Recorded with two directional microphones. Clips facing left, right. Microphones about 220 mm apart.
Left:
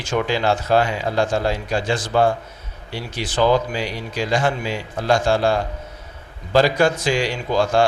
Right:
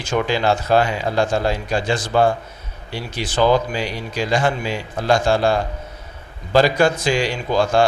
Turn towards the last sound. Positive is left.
turn(degrees=-25)  # may be behind; listen again after turning